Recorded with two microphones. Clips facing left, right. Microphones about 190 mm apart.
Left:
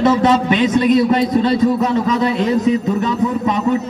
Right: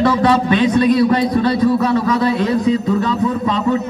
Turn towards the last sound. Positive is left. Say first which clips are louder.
# even
turn(degrees=20)  # may be behind; listen again after turning